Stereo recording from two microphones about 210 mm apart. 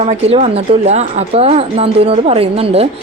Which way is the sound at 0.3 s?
30° right (ahead or behind).